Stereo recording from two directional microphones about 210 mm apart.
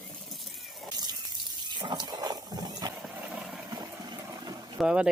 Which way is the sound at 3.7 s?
20° right (ahead or behind).